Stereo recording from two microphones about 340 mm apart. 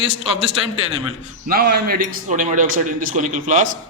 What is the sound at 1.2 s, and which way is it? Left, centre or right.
A man's voice, right.